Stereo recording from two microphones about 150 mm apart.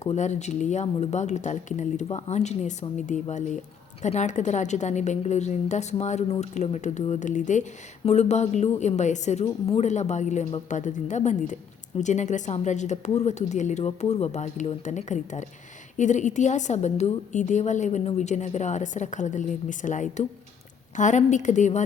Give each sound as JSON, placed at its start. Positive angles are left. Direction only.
{"t": 0.0, "sound": "a woman's voice", "side_deg": 50}